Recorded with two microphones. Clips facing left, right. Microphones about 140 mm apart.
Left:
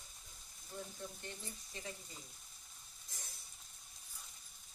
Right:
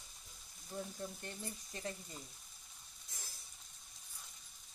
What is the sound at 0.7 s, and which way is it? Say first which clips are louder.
Speech: right 3 dB; 35° right (ahead or behind).